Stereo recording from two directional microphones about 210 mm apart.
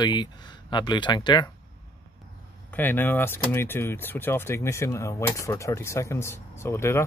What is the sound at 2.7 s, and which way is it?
Speech, 10° left (ahead or behind).